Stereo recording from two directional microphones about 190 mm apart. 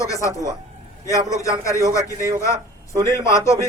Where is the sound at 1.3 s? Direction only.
15° left (ahead or behind).